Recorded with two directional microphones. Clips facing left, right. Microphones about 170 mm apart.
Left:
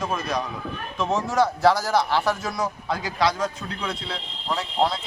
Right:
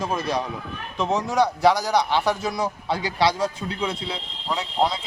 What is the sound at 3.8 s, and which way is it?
Speech, 20° right (ahead or behind).